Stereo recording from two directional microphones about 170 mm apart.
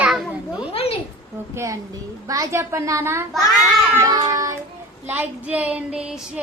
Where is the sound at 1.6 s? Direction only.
20° right (ahead or behind).